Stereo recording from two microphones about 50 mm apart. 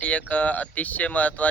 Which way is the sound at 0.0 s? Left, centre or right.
Left.